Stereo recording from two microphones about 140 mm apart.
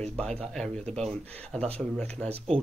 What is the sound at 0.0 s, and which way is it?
Speech, 5° left (ahead or behind).